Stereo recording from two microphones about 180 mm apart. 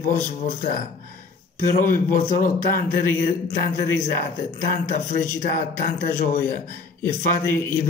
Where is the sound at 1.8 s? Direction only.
50° left (ahead or behind).